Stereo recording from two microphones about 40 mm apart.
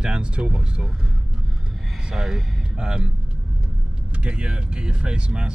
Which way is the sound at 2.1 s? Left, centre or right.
Centre.